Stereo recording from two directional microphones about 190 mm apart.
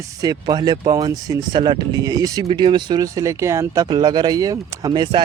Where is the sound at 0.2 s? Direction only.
20° right (ahead or behind).